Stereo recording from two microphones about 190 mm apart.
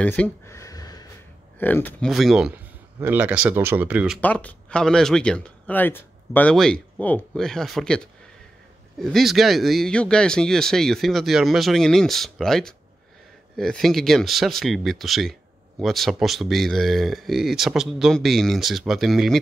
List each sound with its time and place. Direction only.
0.0 s a sound: 5° left (ahead or behind)
1.6 s speech: 10° left (ahead or behind); by 4.2 s 5° right (ahead or behind)
4.2 s speech: 10° left (ahead or behind)